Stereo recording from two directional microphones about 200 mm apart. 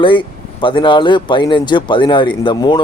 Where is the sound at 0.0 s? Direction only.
25° left (ahead or behind).